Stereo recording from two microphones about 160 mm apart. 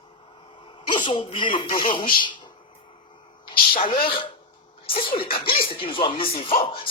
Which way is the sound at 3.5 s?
65° left (ahead or behind).